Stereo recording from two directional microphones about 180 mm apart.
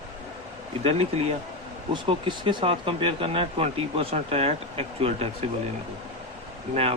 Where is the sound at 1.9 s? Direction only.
25° right (ahead or behind).